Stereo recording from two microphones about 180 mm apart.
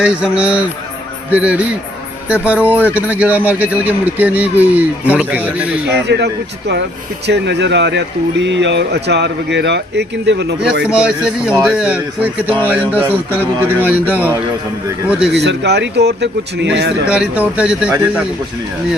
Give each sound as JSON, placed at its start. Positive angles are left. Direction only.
{"t": 0.0, "sound": "speech", "side_deg": -5}
{"t": 6.1, "sound": "speech", "side_deg": -70}
{"t": 10.8, "sound": "speech", "side_deg": -5}
{"t": 15.4, "sound": "speech", "side_deg": -70}
{"t": 17.1, "sound": "speech", "side_deg": -5}